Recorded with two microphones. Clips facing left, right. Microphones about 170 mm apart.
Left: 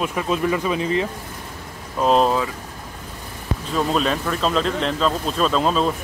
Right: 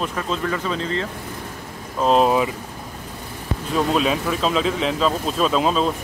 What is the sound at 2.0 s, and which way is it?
Speech, centre (ahead or behind).